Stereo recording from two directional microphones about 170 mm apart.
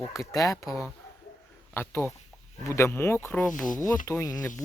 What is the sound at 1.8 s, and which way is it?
Speech, 15° left (ahead or behind).